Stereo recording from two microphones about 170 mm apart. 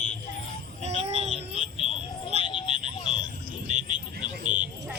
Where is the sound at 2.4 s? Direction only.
30° left (ahead or behind).